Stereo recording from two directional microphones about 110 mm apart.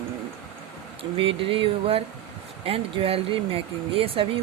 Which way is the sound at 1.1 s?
55° right (ahead or behind).